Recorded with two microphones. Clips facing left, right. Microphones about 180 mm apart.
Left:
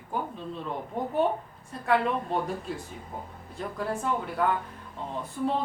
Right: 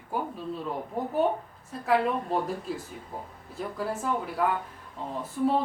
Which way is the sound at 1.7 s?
Centre (ahead or behind).